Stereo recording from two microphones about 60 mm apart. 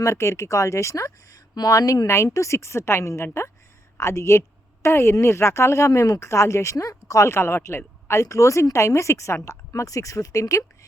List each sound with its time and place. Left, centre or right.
0.0 s speech: left
1.6 s speech: left
2.0 s a woman's voice: left